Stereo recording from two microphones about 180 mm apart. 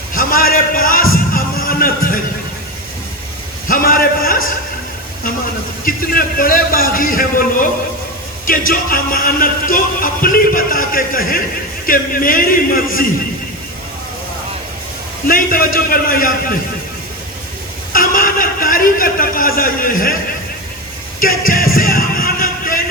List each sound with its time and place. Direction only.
0.1 s a sound: 50° left (ahead or behind)
1.1 s music: 50° left (ahead or behind)
3.7 s a sound: 50° left (ahead or behind)
5.8 s music: 55° left (ahead or behind)
15.3 s music: 50° left (ahead or behind)
17.9 s music: 50° left (ahead or behind)
21.2 s music: 50° left (ahead or behind)